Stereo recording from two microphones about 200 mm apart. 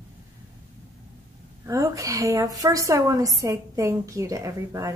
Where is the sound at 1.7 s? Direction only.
15° right (ahead or behind).